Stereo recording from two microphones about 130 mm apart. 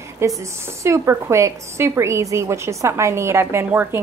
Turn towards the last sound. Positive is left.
turn(degrees=-15)  # may be behind; listen again after turning